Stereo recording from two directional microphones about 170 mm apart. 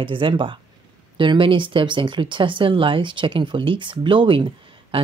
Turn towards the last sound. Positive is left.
turn(degrees=-30)  # may be behind; listen again after turning